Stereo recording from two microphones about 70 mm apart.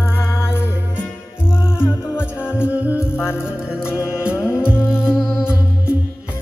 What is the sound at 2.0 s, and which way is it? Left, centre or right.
Music, centre.